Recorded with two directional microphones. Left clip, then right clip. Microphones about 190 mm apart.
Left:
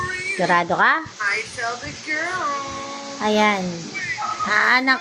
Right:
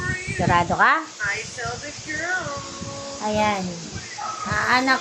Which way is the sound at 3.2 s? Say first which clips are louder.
Left 4 dB; 30° left (ahead or behind).